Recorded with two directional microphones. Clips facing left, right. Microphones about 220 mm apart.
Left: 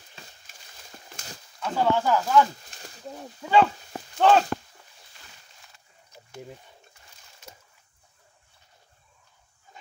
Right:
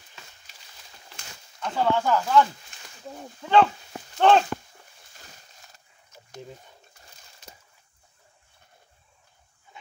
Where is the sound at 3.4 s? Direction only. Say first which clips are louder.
Right 1 dB; 5° left (ahead or behind).